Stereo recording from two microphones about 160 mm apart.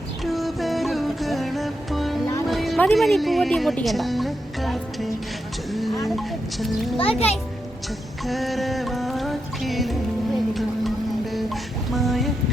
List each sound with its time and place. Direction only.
0.3 s music: centre (ahead or behind)
6.1 s a child's voice: centre (ahead or behind)
7.0 s a child's voice: 40° left (ahead or behind)
8.2 s music: centre (ahead or behind)